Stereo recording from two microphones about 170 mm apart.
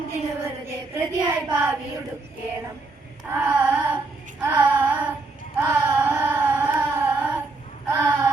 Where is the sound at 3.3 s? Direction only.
10° right (ahead or behind).